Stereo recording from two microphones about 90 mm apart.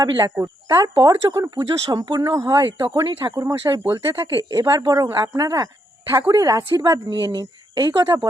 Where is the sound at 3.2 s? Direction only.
50° right (ahead or behind).